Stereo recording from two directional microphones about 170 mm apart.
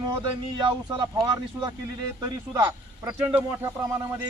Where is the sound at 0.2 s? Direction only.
25° right (ahead or behind).